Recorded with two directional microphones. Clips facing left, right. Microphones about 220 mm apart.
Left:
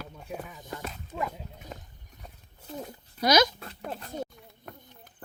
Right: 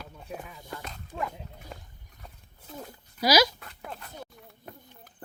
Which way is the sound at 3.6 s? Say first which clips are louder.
Left 4 dB; 35° left (ahead or behind).